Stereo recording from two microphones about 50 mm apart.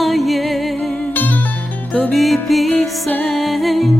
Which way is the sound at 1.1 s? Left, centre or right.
Left.